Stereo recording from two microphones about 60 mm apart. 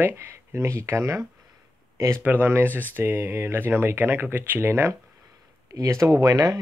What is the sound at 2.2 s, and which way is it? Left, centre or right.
Speech, right.